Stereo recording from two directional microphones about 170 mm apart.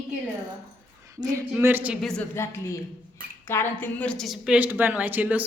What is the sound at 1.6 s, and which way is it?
Speech, 10° right (ahead or behind).